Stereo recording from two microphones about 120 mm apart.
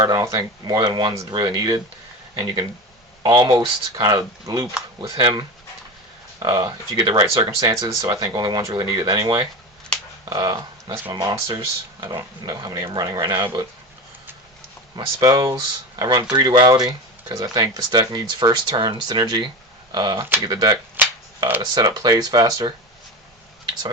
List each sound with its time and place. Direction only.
0.0 s speech: 30° right (ahead or behind)
3.2 s speech: 35° right (ahead or behind)
11.5 s speech: 35° right (ahead or behind)
14.9 s speech: 30° right (ahead or behind)
20.9 s a sound: 15° right (ahead or behind)
21.8 s speech: 40° right (ahead or behind)